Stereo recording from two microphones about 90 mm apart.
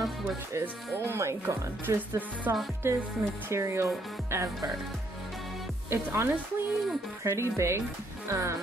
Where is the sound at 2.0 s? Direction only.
20° right (ahead or behind).